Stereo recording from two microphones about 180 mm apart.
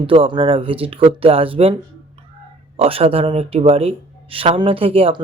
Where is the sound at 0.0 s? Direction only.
30° right (ahead or behind).